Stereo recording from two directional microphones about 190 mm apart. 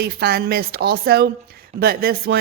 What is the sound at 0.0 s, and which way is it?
Speech, 55° right (ahead or behind).